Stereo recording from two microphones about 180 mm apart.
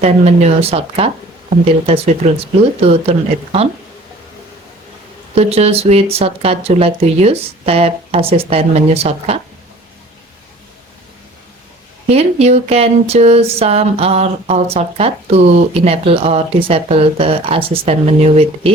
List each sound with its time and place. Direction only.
0.0 s speech: 35° right (ahead or behind)
5.3 s speech: 35° right (ahead or behind)
12.0 s speech: 35° right (ahead or behind)